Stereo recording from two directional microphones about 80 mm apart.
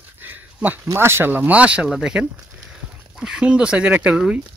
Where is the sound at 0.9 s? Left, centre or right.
Right; by 4.4 s centre.